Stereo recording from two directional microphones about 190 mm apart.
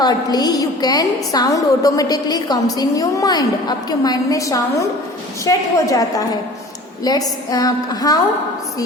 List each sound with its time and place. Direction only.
0.0 s a woman's voice: 20° left (ahead or behind)